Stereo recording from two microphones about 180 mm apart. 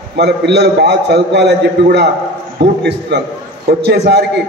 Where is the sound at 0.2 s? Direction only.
70° right (ahead or behind).